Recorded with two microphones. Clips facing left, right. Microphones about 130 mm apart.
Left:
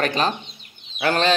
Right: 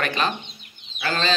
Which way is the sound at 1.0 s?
60° left (ahead or behind).